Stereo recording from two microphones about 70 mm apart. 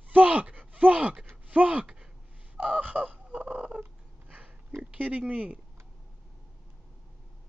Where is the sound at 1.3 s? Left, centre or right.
Centre.